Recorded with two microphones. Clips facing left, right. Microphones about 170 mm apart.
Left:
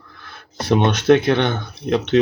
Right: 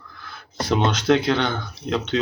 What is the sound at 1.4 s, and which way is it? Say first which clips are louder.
Speech: left 5 dB; 20° left (ahead or behind).